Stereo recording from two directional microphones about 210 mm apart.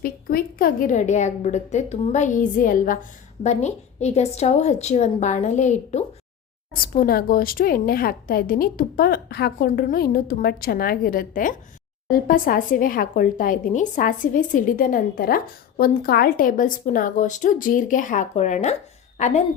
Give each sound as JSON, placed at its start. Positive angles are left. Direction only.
{"t": 0.0, "sound": "a woman's voice", "side_deg": 45}